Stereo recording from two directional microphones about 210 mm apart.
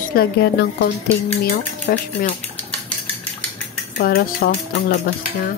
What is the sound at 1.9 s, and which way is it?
Speech, 40° left (ahead or behind).